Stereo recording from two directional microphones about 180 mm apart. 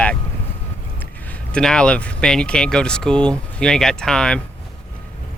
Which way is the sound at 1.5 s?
5° left (ahead or behind).